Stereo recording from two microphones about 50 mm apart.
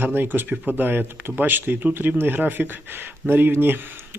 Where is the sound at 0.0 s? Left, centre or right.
Right.